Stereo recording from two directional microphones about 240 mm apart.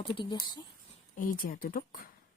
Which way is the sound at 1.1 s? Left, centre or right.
Left.